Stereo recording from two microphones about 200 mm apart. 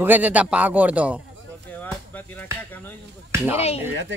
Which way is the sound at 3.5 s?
30° left (ahead or behind).